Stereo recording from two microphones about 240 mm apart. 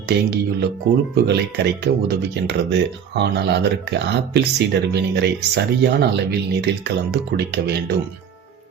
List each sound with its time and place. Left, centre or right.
0.1 s speech: right